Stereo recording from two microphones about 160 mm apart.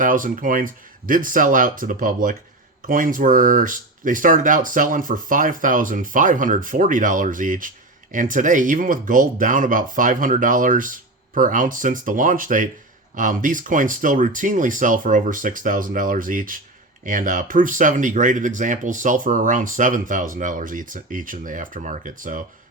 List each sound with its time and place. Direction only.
0.0 s speech: 55° right (ahead or behind)